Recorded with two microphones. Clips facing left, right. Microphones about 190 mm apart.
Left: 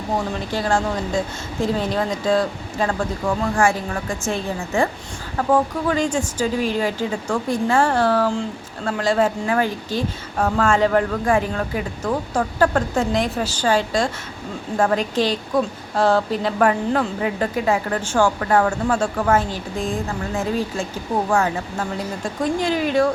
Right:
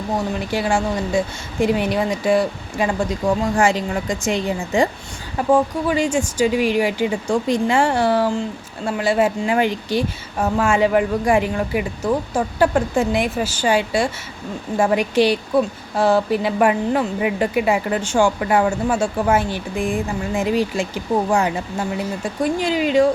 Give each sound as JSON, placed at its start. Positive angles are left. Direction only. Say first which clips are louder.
{"t": 0.3, "sound": "a woman's voice", "louder": "right 1 dB", "side_deg": -10}
{"t": 6.5, "sound": "a woman's voice", "louder": "right 3 dB", "side_deg": -75}
{"t": 6.7, "sound": "a woman's voice", "louder": "right 3 dB", "side_deg": -10}